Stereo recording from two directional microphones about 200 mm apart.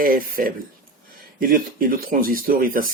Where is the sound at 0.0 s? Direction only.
45° right (ahead or behind).